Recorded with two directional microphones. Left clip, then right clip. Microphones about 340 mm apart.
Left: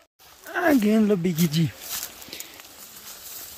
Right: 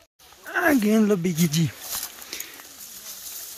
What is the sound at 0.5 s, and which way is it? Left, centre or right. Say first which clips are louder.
Speech: even; centre.